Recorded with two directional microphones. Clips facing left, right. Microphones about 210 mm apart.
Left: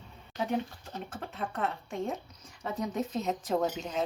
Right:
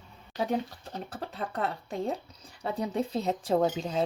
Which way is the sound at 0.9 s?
35° right (ahead or behind).